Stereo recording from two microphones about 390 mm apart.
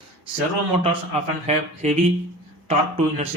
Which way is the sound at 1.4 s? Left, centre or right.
Centre.